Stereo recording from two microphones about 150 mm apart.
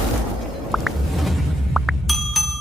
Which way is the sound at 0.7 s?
Centre (ahead or behind).